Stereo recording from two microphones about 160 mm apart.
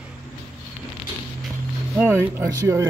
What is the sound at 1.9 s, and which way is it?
Speech, 15° right (ahead or behind).